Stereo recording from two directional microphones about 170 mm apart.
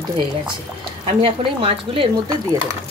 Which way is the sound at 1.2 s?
30° right (ahead or behind).